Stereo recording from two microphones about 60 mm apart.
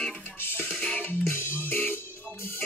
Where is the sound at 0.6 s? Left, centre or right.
Left.